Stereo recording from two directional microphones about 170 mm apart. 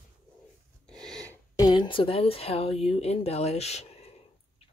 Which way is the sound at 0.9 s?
5° left (ahead or behind).